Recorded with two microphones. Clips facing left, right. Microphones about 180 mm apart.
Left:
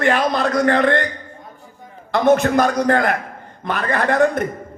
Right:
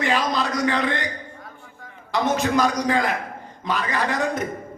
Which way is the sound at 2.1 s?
55° left (ahead or behind).